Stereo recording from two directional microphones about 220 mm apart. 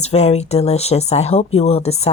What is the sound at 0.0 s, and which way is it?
Speech, 30° left (ahead or behind).